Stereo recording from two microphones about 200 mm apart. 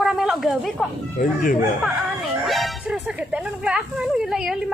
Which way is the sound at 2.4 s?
Centre (ahead or behind).